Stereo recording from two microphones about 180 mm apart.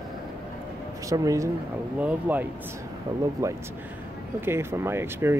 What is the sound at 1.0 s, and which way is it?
Speech, 20° right (ahead or behind).